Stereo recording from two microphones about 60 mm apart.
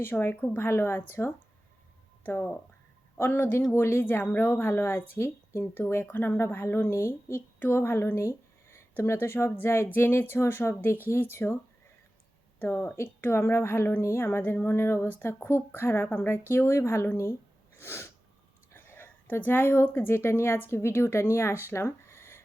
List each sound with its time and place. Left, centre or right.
0.0 s speech: left
3.2 s a woman's voice: left
4.0 s a woman's voice: left
6.1 s a woman's voice: left
9.0 s a woman's voice: left
12.5 s a woman's voice: left
17.7 s sneeze: left
18.7 s speech: left